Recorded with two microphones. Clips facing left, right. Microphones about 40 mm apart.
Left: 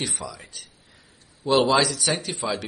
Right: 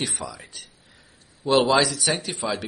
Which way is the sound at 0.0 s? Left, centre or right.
Centre.